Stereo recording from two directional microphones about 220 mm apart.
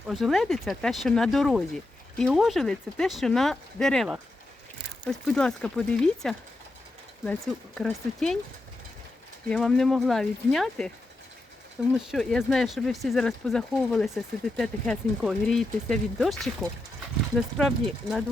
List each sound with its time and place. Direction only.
0.1 s speech: centre (ahead or behind)
9.5 s speech: centre (ahead or behind)
11.9 s speech: centre (ahead or behind)